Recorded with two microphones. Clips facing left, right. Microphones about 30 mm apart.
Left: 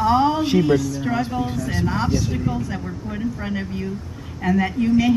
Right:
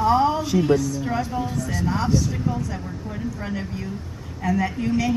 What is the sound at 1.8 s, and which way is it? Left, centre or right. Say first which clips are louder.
A woman's voice: even; centre.